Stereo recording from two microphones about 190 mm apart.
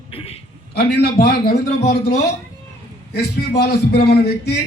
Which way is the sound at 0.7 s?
55° left (ahead or behind).